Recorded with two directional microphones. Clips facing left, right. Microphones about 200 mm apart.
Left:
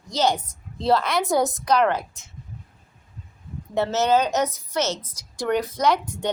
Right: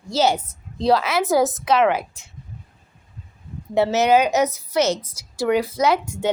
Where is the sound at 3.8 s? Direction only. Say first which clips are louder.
Right 4 dB; 10° right (ahead or behind).